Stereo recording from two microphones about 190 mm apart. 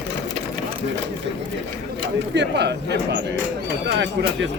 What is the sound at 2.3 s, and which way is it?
Speech, 65° right (ahead or behind).